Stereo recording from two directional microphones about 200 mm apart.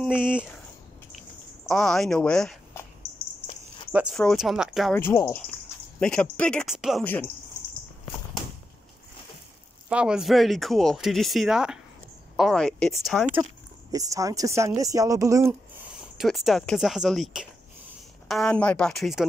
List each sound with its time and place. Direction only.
0.0 s speech: 5° right (ahead or behind)
1.7 s speech: 5° left (ahead or behind)
3.9 s speech: centre (ahead or behind)
4.9 s speech: 10° left (ahead or behind)
9.8 s speech: 5° right (ahead or behind)
13.9 s speech: 15° right (ahead or behind)
16.0 s speech: centre (ahead or behind)